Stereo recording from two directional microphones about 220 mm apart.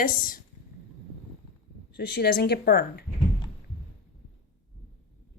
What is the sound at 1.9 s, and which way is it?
A woman's voice, 45° left (ahead or behind).